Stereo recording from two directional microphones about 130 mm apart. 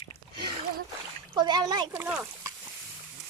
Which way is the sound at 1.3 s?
35° right (ahead or behind).